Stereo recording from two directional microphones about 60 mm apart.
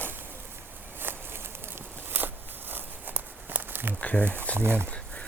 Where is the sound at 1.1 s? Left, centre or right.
Right.